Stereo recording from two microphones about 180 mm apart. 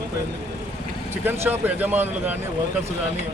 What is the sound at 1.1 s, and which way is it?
Speech, 10° right (ahead or behind).